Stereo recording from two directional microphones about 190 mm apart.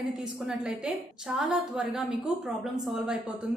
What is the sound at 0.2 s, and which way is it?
A woman's voice, 5° right (ahead or behind).